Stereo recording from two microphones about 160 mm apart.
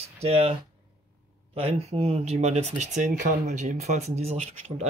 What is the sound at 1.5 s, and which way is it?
Speech, 40° right (ahead or behind).